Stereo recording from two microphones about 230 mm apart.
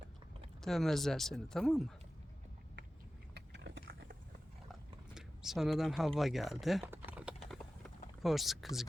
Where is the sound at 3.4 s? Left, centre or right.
Right.